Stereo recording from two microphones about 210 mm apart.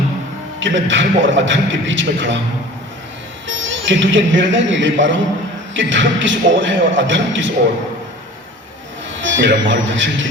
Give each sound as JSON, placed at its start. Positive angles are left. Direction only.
{"t": 0.6, "sound": "a man's voice", "side_deg": -65}
{"t": 3.4, "sound": "a man's voice", "side_deg": -65}
{"t": 9.1, "sound": "speech", "side_deg": -60}